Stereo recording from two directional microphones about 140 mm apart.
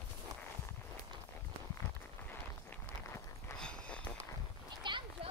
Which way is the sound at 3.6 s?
5° left (ahead or behind).